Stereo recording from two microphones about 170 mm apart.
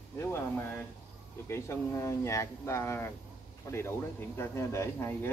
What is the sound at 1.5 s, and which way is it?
Speech, 15° left (ahead or behind).